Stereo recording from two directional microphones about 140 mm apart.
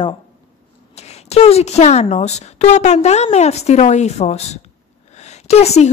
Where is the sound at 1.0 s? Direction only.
50° left (ahead or behind).